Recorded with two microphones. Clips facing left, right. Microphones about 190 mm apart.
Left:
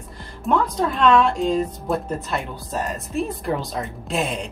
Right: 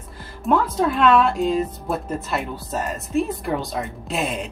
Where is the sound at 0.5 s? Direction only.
5° right (ahead or behind).